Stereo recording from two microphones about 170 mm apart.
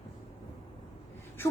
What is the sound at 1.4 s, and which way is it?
Gasp, 15° left (ahead or behind).